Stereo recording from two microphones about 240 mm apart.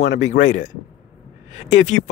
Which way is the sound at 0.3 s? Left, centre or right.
Left.